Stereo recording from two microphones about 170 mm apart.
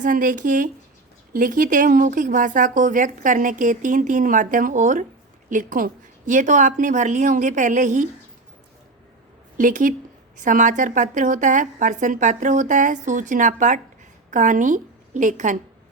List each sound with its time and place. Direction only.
0.0 s a woman's voice: 50° right (ahead or behind)
9.6 s a woman's voice: 55° right (ahead or behind)